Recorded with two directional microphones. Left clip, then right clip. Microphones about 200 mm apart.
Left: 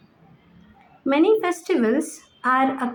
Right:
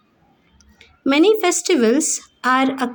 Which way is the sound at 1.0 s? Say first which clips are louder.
Right 4 dB; 50° right (ahead or behind).